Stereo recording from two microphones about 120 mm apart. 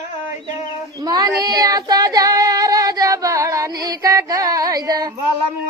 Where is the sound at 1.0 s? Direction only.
30° right (ahead or behind).